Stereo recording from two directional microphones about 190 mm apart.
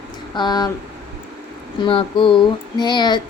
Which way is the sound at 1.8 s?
25° left (ahead or behind).